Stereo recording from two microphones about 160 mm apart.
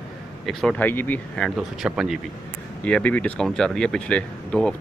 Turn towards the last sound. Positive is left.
turn(degrees=5)  # may be behind; listen again after turning